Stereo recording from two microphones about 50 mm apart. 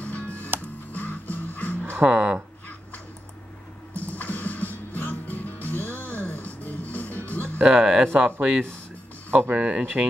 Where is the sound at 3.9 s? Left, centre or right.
Left.